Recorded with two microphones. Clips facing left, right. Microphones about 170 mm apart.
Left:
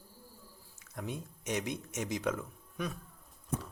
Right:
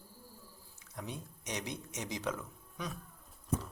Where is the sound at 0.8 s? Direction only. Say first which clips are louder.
Left 3 dB; 50° left (ahead or behind).